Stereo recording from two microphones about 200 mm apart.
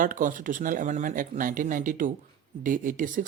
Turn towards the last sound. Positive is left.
turn(degrees=-40)  # may be behind; listen again after turning